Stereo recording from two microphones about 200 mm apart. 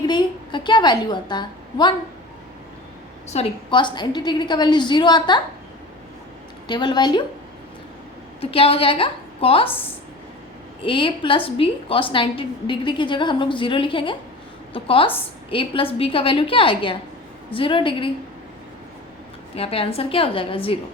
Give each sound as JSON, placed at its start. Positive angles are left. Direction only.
{"t": 0.0, "sound": "a woman's voice", "side_deg": 20}
{"t": 3.2, "sound": "a woman's voice", "side_deg": 25}
{"t": 6.7, "sound": "a woman's voice", "side_deg": 20}
{"t": 8.4, "sound": "a woman's voice", "side_deg": 30}
{"t": 10.8, "sound": "a woman's voice", "side_deg": 25}
{"t": 19.5, "sound": "a woman's voice", "side_deg": 30}